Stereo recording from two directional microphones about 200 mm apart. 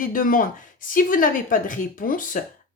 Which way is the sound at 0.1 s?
45° left (ahead or behind).